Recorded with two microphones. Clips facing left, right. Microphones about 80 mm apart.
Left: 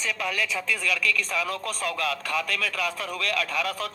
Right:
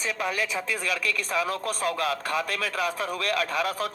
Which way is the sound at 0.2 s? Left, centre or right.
Right.